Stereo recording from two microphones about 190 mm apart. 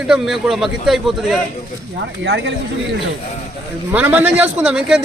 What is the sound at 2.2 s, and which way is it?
Speech, 65° right (ahead or behind).